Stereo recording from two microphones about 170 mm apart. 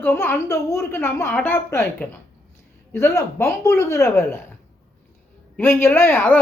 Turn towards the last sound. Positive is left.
turn(degrees=15)  # may be behind; listen again after turning